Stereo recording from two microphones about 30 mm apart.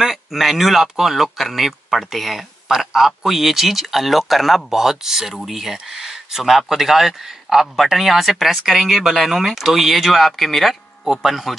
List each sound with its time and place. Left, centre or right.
0.1 s speech: centre
4.6 s speech: centre